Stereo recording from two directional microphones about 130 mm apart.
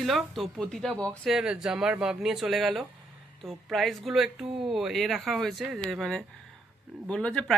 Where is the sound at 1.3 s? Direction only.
5° right (ahead or behind).